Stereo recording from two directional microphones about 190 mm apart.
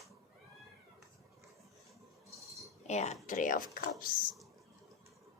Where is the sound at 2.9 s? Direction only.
35° left (ahead or behind).